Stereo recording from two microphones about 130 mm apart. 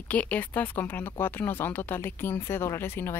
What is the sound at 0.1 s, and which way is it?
Speech, 10° left (ahead or behind).